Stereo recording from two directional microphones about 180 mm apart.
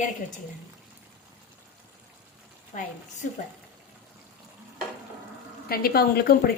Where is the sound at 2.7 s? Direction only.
40° left (ahead or behind).